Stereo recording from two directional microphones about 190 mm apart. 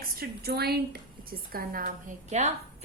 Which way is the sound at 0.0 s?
50° right (ahead or behind).